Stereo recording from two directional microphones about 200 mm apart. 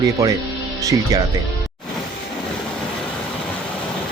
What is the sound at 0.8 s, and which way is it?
Speech, 15° right (ahead or behind).